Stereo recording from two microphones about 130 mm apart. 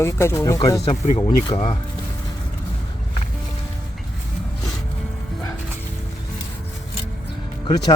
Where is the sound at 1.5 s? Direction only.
40° left (ahead or behind).